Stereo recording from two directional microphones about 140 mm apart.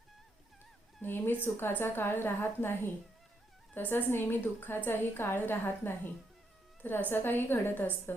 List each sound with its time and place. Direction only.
1.0 s a woman's voice: 15° left (ahead or behind)